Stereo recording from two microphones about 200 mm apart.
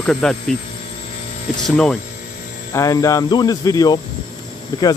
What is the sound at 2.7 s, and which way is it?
Speech, 15° left (ahead or behind).